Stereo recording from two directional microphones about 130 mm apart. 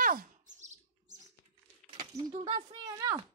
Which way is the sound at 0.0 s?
90° right.